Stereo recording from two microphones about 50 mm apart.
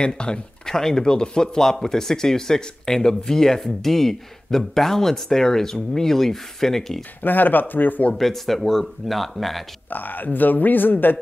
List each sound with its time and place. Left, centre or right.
0.0 s speech: centre
7.2 s speech: left
8.1 s speech: centre
9.8 s speech: left